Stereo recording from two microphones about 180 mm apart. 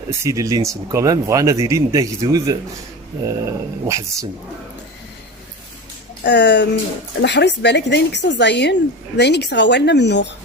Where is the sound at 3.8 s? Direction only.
15° right (ahead or behind).